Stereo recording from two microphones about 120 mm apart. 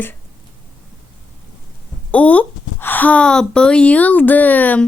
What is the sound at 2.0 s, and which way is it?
A woman's voice, 10° left (ahead or behind).